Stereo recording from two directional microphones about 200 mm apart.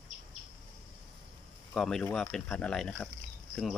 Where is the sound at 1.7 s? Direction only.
Centre (ahead or behind).